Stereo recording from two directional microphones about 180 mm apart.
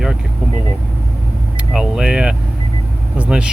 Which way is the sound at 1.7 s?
5° right (ahead or behind).